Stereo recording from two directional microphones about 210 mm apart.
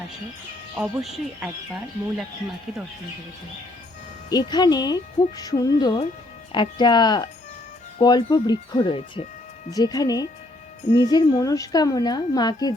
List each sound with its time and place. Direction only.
0.8 s speech: centre (ahead or behind)
4.3 s a woman's voice: 20° left (ahead or behind)
5.4 s music: 15° left (ahead or behind)
6.5 s a woman's voice: 20° left (ahead or behind)
9.6 s music: 15° left (ahead or behind)
10.9 s a woman's voice: 20° left (ahead or behind)